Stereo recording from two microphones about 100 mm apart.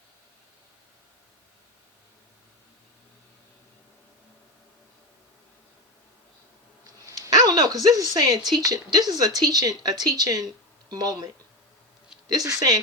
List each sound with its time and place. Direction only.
7.0 s a sound: 35° right (ahead or behind)
8.5 s speech: 40° right (ahead or behind)
12.3 s speech: 40° right (ahead or behind)